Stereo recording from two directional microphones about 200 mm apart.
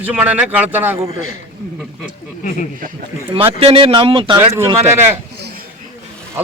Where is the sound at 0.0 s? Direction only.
10° right (ahead or behind).